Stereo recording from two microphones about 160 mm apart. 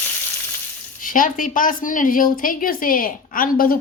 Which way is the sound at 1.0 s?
55° left (ahead or behind).